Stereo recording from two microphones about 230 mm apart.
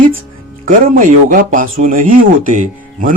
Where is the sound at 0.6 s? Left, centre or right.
Right.